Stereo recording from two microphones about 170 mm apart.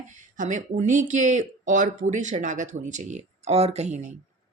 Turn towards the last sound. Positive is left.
turn(degrees=-40)  # may be behind; listen again after turning